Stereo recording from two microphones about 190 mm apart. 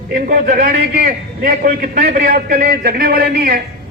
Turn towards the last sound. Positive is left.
turn(degrees=-50)  # may be behind; listen again after turning